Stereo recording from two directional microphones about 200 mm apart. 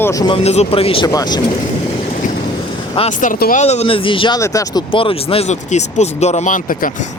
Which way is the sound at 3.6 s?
30° left (ahead or behind).